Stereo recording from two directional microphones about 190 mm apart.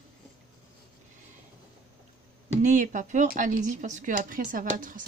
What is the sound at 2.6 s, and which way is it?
Speech, 40° right (ahead or behind).